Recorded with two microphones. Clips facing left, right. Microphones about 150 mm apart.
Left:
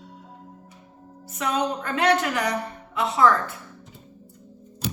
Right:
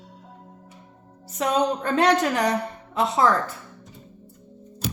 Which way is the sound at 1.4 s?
35° right (ahead or behind).